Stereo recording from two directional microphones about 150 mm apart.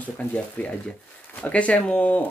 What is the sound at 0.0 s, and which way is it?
Speech, 10° left (ahead or behind).